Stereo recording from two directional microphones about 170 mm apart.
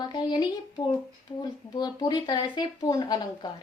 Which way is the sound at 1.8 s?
25° left (ahead or behind).